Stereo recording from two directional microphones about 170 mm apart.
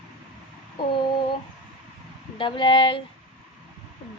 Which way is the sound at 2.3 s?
30° left (ahead or behind).